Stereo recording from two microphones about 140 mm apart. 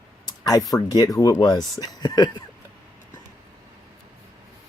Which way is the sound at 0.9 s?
25° left (ahead or behind).